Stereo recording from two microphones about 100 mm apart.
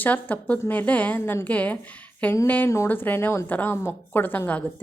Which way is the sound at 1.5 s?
15° left (ahead or behind).